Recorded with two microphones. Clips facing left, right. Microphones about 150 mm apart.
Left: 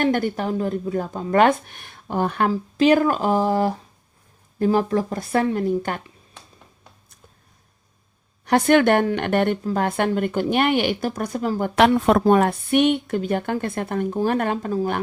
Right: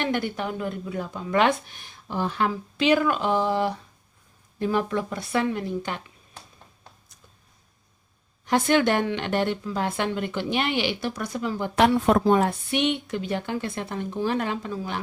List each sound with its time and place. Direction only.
0.0 s a woman's voice: 45° left (ahead or behind)
2.5 s a woman's voice: 45° left (ahead or behind)
8.4 s a woman's voice: 60° left (ahead or behind); by 11.7 s 40° left (ahead or behind)
11.9 s a woman's voice: 80° left
12.2 s a woman's voice: 60° left (ahead or behind)